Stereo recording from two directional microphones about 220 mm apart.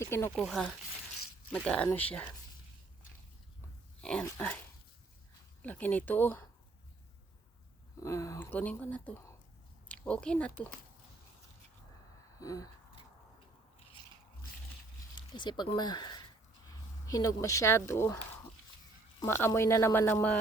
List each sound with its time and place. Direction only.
0.0 s speech: 10° left (ahead or behind)
0.3 s speech: centre (ahead or behind)
4.0 s speech: 5° left (ahead or behind)
5.6 s speech: 5° left (ahead or behind)
8.0 s speech: 15° left (ahead or behind)
12.4 s a sound: 15° left (ahead or behind)
15.1 s speech: 20° left (ahead or behind)
19.2 s speech: 15° left (ahead or behind)